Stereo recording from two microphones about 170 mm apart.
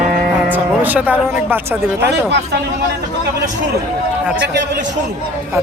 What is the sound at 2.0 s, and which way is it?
Speech, 80° right.